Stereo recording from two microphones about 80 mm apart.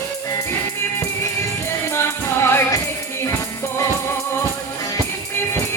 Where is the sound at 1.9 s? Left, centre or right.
Left.